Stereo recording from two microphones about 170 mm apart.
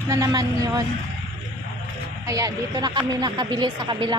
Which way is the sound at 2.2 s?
20° right (ahead or behind).